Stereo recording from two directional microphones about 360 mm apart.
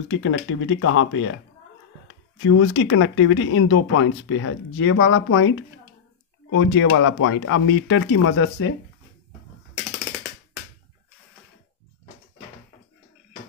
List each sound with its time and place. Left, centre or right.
0.1 s speech: left
2.3 s speech: left
6.5 s speech: left